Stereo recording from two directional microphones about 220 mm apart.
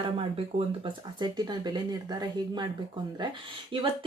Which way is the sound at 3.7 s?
25° right (ahead or behind).